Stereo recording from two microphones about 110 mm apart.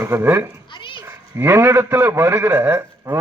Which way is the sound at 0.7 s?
50° left (ahead or behind).